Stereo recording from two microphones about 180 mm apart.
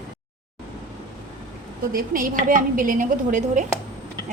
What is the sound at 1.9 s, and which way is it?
A woman's voice, 50° right (ahead or behind).